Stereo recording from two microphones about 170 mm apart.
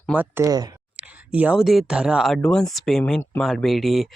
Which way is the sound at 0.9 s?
10° right (ahead or behind).